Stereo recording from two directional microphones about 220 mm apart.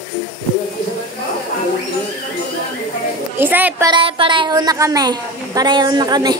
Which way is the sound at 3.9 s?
25° right (ahead or behind).